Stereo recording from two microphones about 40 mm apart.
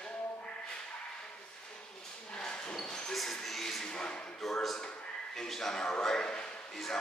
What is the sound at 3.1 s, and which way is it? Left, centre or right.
Music, centre.